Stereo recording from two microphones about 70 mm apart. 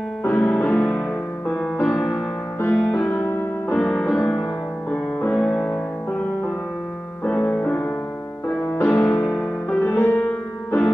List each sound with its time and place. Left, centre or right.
0.2 s music: left; by 3.0 s centre
3.0 s music: left
3.7 s music: centre
7.2 s music: left
9.3 s music: centre
9.8 s music: left